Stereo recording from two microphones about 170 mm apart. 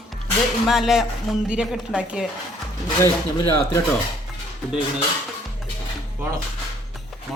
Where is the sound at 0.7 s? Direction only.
Centre (ahead or behind).